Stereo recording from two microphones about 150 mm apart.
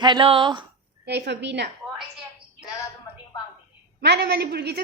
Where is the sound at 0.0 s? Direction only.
35° right (ahead or behind).